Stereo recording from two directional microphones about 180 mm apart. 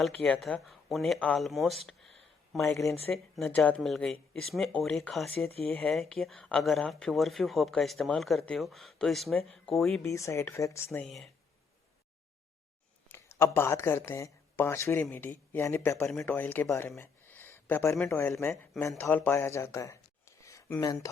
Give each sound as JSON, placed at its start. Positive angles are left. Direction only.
{"t": 0.0, "sound": "speech", "side_deg": 5}
{"t": 10.0, "sound": "speech", "side_deg": 15}
{"t": 11.0, "sound": "speech", "side_deg": 0}
{"t": 13.1, "sound": "speech", "side_deg": 15}